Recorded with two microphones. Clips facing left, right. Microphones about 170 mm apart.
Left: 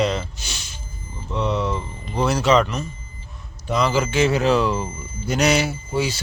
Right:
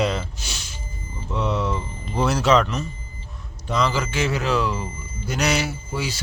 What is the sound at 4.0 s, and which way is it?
Speech, 20° left (ahead or behind).